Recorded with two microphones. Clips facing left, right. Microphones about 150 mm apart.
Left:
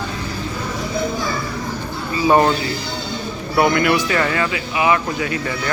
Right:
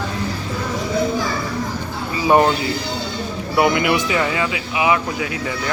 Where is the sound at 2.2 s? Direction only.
15° right (ahead or behind).